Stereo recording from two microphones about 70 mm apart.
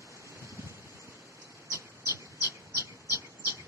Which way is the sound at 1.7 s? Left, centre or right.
Right.